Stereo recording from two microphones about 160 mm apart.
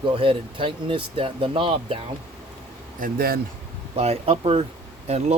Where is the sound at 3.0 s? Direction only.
65° right (ahead or behind).